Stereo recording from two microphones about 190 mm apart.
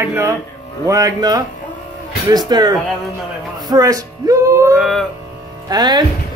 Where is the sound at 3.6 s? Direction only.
20° right (ahead or behind).